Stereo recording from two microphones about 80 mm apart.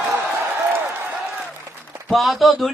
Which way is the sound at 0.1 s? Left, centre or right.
Right.